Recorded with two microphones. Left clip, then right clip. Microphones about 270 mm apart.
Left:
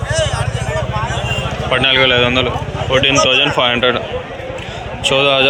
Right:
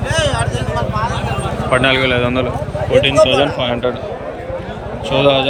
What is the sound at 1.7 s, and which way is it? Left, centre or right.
Speech, centre.